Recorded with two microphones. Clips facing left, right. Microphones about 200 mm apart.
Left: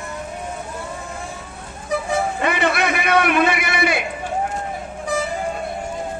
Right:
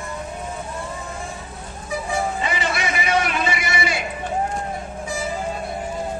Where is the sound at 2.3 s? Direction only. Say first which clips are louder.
Left 5 dB; 60° left (ahead or behind).